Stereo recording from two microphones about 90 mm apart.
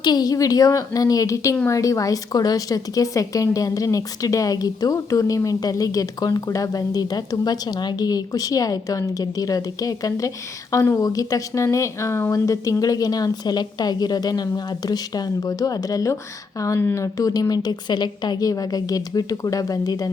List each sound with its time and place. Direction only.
0.0 s a woman's voice: 50° left (ahead or behind)